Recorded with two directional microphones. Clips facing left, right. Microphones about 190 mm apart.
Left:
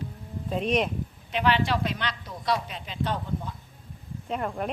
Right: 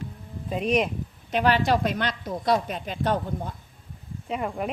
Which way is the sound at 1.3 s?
45° right (ahead or behind).